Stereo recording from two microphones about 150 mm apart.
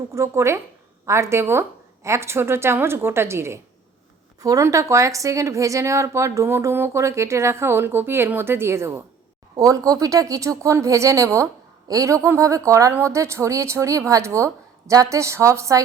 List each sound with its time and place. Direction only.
0.1 s a woman's voice: 20° right (ahead or behind)